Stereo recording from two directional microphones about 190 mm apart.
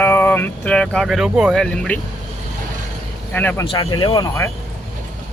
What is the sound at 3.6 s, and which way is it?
Speech, 25° left (ahead or behind).